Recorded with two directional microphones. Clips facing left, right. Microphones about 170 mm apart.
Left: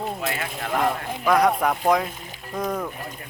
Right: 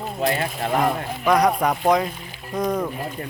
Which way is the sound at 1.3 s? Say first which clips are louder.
Right 1 dB; centre (ahead or behind).